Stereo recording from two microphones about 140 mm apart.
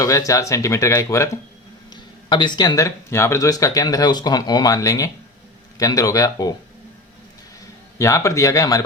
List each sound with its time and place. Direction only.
0.0 s speech: 25° left (ahead or behind)
1.9 s speech: 30° left (ahead or behind)
7.9 s speech: 20° left (ahead or behind)